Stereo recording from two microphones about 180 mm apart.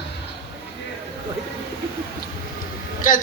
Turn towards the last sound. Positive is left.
turn(degrees=50)  # may be behind; listen again after turning